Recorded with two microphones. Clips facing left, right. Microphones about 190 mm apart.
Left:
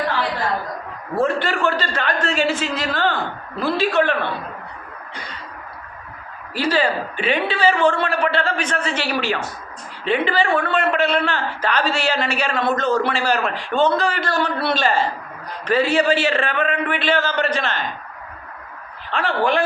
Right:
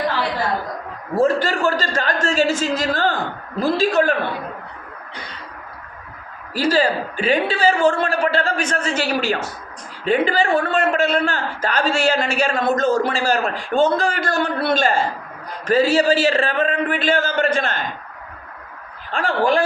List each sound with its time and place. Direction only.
1.2 s a man's voice: 40° right (ahead or behind)
6.5 s a man's voice: 40° right (ahead or behind)
19.1 s a man's voice: 45° right (ahead or behind)